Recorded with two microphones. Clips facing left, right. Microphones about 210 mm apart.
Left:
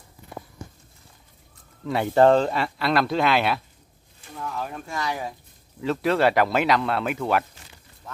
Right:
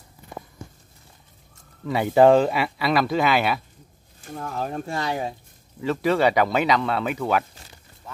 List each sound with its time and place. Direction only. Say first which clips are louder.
1.9 s speech: right 2 dB; centre (ahead or behind)
4.2 s speech: right 2 dB; 45° right (ahead or behind)
5.8 s speech: right 1 dB; centre (ahead or behind)